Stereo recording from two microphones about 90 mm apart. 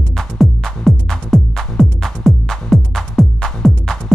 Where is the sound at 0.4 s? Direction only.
5° left (ahead or behind).